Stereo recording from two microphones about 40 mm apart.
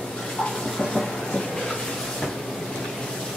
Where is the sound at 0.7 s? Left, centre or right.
Centre.